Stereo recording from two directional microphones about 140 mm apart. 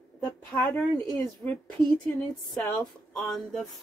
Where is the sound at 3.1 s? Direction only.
5° left (ahead or behind).